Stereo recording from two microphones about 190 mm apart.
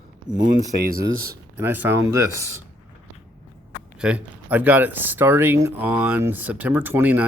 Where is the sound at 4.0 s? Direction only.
5° right (ahead or behind).